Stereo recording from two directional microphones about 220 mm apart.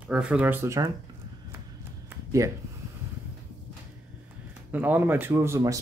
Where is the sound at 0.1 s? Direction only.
5° right (ahead or behind).